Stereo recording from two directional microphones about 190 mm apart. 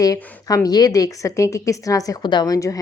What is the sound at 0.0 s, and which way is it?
A woman's voice, 15° left (ahead or behind).